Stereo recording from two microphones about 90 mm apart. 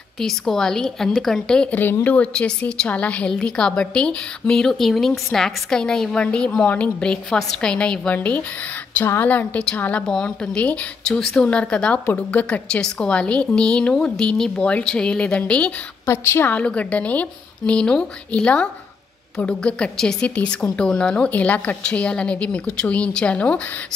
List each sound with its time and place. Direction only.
0.2 s a woman's voice: 5° left (ahead or behind)
16.1 s a woman's voice: 30° left (ahead or behind)
16.5 s a woman's voice: 15° left (ahead or behind)